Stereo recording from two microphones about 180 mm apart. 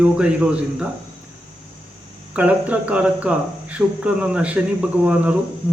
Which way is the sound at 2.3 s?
10° right (ahead or behind).